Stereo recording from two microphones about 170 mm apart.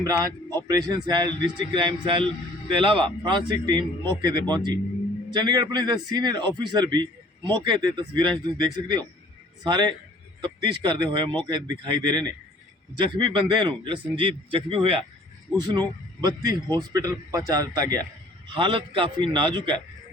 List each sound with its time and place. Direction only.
0.0 s a man's voice: 20° right (ahead or behind)
9.6 s a man's voice: 25° right (ahead or behind)